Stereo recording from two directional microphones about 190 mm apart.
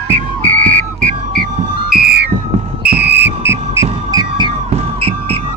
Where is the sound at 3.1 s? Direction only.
10° right (ahead or behind); by 5.3 s 30° right (ahead or behind).